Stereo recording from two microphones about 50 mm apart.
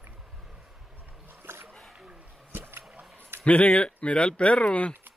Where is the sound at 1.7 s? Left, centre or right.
Centre.